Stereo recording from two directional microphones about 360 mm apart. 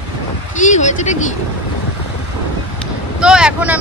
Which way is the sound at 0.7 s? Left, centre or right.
Centre.